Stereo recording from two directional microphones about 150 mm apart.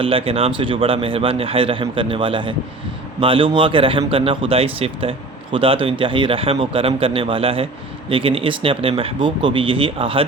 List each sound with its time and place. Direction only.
0.0 s a man's voice: 35° right (ahead or behind)